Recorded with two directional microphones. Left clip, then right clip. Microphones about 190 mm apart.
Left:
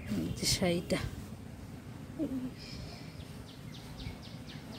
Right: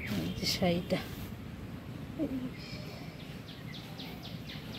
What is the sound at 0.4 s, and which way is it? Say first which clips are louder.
Speech: even; 25° left (ahead or behind).